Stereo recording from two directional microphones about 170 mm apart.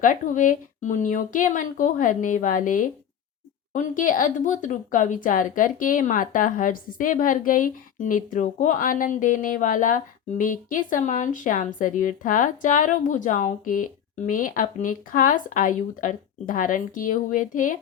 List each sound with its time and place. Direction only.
0.0 s speech: 50° left (ahead or behind)